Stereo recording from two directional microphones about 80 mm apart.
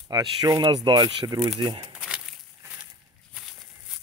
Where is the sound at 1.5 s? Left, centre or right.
Right.